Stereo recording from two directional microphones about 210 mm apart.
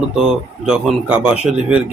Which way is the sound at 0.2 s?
Centre (ahead or behind).